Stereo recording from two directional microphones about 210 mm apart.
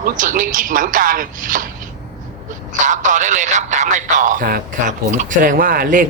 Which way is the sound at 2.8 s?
35° right (ahead or behind).